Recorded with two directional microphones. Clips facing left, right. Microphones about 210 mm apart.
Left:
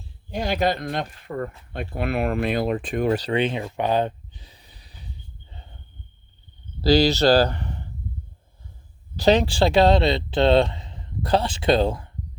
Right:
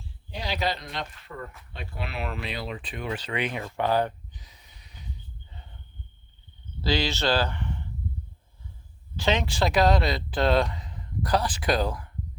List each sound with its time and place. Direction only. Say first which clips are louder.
0.3 s speech: left 7 dB; 50° left (ahead or behind); by 3.6 s 30° left (ahead or behind)
3.6 s a sound: left 3 dB; 20° left (ahead or behind)
6.8 s speech: left 9 dB; 40° left (ahead or behind)
9.1 s speech: left 8 dB; 35° left (ahead or behind)